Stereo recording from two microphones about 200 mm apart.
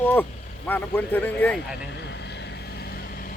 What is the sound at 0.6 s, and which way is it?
Speech, 10° left (ahead or behind).